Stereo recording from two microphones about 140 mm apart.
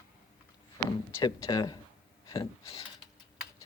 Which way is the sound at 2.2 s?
25° left (ahead or behind).